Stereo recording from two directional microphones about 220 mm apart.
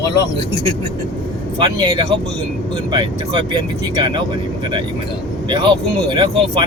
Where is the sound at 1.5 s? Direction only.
20° right (ahead or behind).